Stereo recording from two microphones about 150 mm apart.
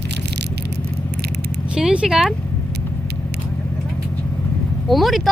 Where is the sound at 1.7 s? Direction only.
5° right (ahead or behind).